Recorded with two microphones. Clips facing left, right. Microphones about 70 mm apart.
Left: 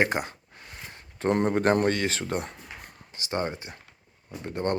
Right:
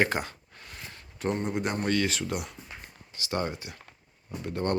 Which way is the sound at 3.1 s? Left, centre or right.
Left.